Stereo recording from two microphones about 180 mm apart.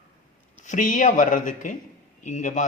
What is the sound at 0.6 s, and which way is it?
Speech, 45° left (ahead or behind).